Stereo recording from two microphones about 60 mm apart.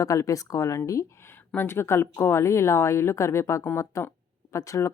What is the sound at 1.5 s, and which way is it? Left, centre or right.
Speech, left.